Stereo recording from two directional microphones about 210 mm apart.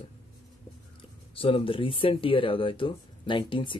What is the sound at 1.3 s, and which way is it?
Speech, 25° left (ahead or behind).